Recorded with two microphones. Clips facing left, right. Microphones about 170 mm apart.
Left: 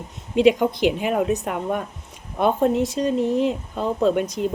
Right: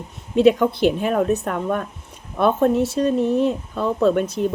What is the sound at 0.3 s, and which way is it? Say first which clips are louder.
Speech: right 2 dB; 15° left (ahead or behind).